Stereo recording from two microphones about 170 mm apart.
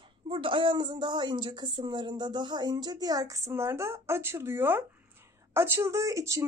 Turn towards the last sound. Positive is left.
turn(degrees=-20)  # may be behind; listen again after turning